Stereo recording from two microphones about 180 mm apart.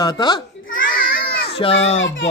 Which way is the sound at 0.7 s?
50° left (ahead or behind).